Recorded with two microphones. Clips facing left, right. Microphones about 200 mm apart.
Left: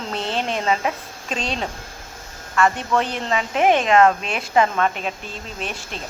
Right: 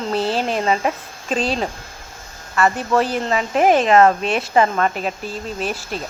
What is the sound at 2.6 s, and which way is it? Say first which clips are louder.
Speech: right 2 dB; 5° right (ahead or behind).